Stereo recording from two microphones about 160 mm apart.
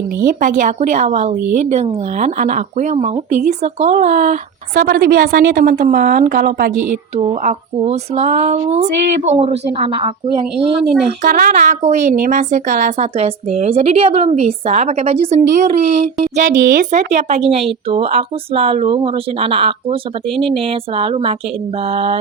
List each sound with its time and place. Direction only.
0.3 s a woman's voice: 60° right (ahead or behind)
7.4 s a woman's voice: 40° right (ahead or behind)
11.2 s a woman's voice: 60° right (ahead or behind); by 15.4 s 40° right (ahead or behind)
15.9 s a woman's voice: 50° right (ahead or behind)